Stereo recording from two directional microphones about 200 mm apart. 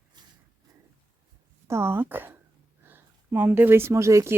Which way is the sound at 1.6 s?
15° right (ahead or behind).